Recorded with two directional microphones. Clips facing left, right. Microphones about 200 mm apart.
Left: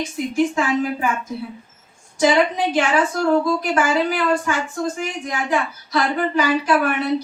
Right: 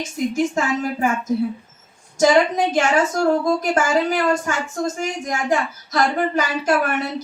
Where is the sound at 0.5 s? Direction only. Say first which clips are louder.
Left 1 dB; 45° right (ahead or behind).